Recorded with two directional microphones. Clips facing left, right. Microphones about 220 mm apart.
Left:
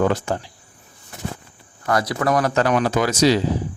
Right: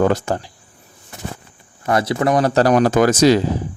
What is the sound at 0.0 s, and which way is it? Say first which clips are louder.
Speech: right 3 dB; 40° right (ahead or behind).